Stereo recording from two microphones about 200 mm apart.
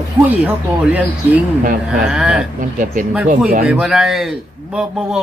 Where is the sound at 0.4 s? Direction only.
5° right (ahead or behind).